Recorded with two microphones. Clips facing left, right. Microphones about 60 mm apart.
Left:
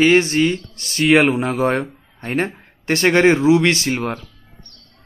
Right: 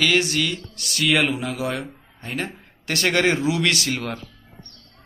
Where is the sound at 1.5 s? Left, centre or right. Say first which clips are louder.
Left 8 dB; left.